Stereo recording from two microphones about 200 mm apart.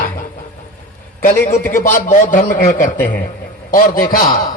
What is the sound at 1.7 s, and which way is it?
A man's voice, 40° left (ahead or behind).